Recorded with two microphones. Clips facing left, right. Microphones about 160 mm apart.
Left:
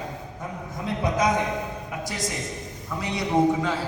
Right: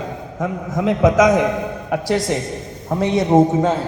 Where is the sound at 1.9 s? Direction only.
70° right (ahead or behind).